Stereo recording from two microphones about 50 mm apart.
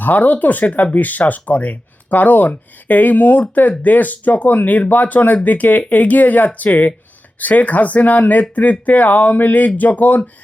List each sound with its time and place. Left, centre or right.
0.0 s speech: left